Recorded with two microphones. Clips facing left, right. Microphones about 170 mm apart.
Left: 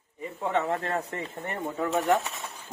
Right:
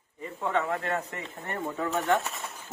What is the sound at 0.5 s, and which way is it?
Speech, 30° left (ahead or behind).